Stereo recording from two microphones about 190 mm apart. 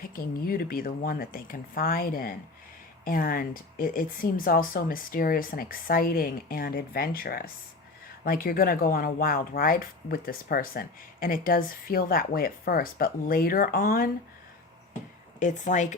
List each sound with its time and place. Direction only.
0.0 s speech: 50° left (ahead or behind)
15.4 s speech: 40° left (ahead or behind)